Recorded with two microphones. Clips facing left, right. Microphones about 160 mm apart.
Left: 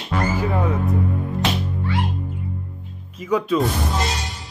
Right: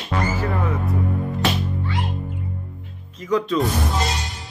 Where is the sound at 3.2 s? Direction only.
10° left (ahead or behind).